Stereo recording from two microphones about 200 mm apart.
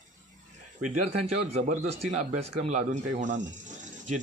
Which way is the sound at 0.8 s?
35° right (ahead or behind).